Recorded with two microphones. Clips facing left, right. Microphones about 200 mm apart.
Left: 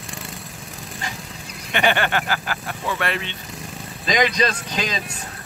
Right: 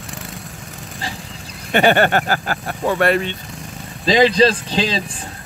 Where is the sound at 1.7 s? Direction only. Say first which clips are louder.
Right 7 dB; 45° right (ahead or behind).